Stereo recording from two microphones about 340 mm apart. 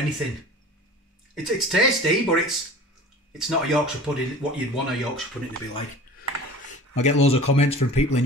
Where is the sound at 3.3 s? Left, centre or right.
Centre.